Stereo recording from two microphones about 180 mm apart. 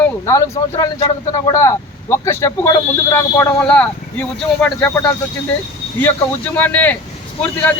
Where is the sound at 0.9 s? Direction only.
30° left (ahead or behind).